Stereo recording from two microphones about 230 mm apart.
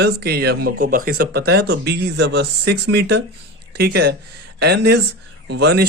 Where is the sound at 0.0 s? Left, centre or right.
Right.